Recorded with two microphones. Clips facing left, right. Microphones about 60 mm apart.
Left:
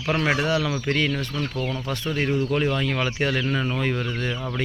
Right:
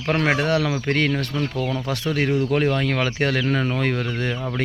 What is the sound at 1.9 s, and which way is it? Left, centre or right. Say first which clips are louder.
Speech: right 2 dB; right.